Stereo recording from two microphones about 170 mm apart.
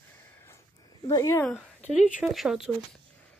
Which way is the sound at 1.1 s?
20° left (ahead or behind).